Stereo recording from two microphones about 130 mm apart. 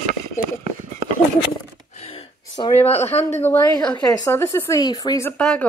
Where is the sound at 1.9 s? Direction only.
55° left (ahead or behind).